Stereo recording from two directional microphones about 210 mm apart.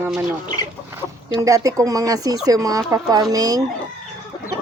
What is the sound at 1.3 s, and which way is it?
Speech, 15° right (ahead or behind).